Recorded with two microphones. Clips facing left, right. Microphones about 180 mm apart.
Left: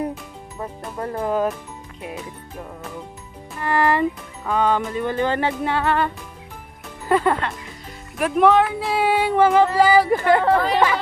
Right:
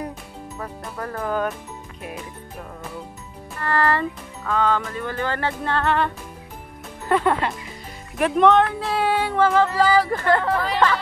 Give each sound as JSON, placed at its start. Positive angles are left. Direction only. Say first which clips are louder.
{"t": 0.6, "sound": "speech", "louder": "left 3 dB", "side_deg": 20}
{"t": 3.5, "sound": "speech", "louder": "left 2 dB", "side_deg": 15}
{"t": 10.4, "sound": "speech", "louder": "left 5 dB", "side_deg": 30}